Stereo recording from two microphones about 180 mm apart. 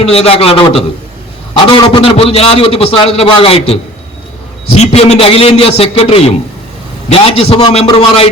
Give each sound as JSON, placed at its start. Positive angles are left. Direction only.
{"t": 0.0, "sound": "a man's voice", "side_deg": 35}